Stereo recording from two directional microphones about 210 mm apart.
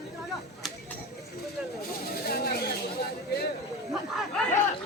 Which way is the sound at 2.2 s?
45° left (ahead or behind).